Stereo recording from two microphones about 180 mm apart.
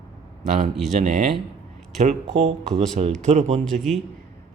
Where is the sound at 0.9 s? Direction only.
40° right (ahead or behind).